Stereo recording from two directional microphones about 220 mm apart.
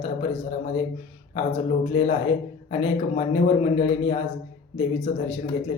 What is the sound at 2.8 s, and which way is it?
Speech, 30° left (ahead or behind).